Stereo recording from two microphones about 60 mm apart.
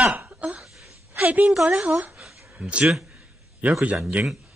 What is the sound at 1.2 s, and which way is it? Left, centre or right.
Speech, right.